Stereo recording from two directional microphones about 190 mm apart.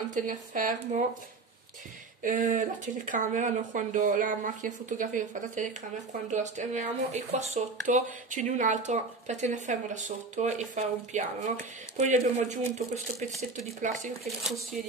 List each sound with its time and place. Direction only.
0.1 s speech: 45° right (ahead or behind)
2.2 s speech: 45° right (ahead or behind)